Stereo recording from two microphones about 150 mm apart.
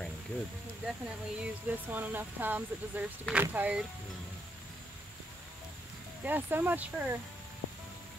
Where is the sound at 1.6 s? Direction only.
10° right (ahead or behind).